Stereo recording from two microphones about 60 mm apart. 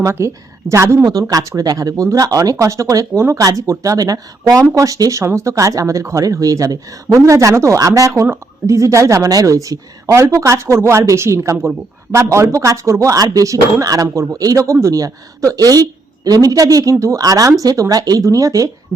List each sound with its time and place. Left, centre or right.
0.2 s speech: right
1.3 s speech: right
3.2 s speech: right
3.4 s speech: right
4.7 s speech: right
5.2 s a woman's voice: right
8.2 s a woman's voice: right